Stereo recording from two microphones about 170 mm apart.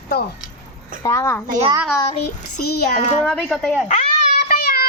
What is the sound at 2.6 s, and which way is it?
Speech, 65° left (ahead or behind).